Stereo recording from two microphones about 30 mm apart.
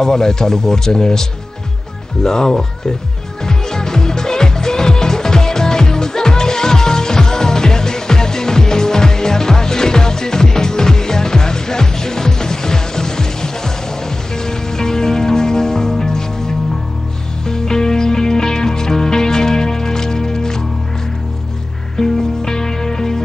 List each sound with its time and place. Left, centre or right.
0.0 s a man's voice: left
2.2 s a man's voice: left
3.4 s music: centre
21.9 s music: centre